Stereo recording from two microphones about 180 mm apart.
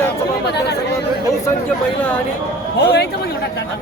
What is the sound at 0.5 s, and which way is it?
Speech, 65° left (ahead or behind).